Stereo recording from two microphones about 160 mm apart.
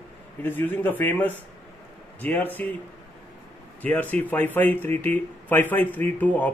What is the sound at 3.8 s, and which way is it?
Speech, 10° left (ahead or behind).